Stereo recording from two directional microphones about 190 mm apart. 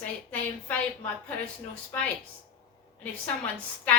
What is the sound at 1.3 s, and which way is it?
A woman's voice, 10° left (ahead or behind).